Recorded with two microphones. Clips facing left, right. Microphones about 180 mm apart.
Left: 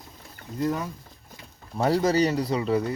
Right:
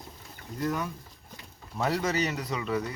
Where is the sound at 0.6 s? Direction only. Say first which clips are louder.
Left 4 dB; 25° left (ahead or behind).